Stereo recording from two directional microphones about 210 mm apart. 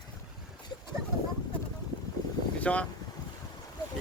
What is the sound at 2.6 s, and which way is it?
Speech, 5° left (ahead or behind).